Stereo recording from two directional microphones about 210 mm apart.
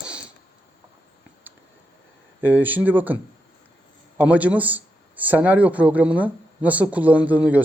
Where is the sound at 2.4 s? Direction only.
10° right (ahead or behind).